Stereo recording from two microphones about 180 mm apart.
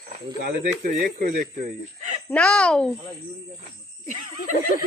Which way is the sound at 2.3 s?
5° left (ahead or behind).